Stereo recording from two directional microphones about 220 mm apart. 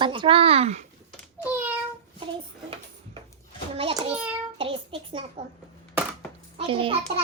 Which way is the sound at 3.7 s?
25° right (ahead or behind).